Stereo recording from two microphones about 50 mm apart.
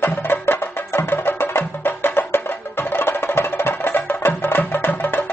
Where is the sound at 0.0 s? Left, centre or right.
Left.